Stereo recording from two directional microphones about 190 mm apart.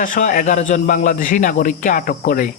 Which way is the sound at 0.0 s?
45° left (ahead or behind).